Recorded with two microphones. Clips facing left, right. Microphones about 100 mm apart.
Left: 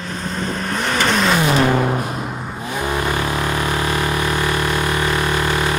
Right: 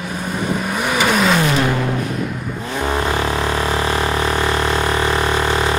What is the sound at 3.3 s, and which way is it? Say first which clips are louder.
Vehicle: right 1 dB; 20° right (ahead or behind).